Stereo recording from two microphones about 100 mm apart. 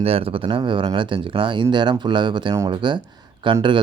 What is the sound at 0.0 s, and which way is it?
Speech, 75° right (ahead or behind).